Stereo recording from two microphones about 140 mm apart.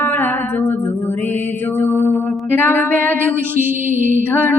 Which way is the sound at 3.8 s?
65° right (ahead or behind).